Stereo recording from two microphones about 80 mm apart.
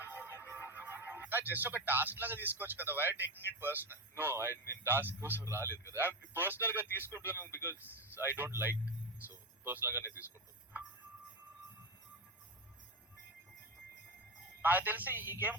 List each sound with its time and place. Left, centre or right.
0.0 s music: right
0.5 s a man's voice: right
14.6 s a man's voice: right